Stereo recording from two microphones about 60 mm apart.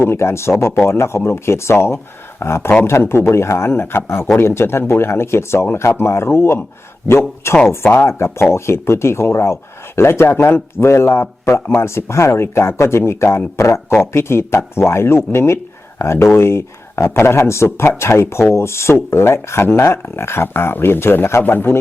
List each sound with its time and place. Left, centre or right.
0.0 s speech: left